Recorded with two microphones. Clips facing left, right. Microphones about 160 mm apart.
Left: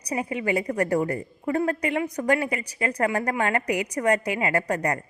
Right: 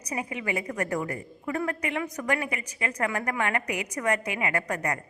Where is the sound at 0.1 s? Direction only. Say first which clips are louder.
Left 5 dB; 30° left (ahead or behind).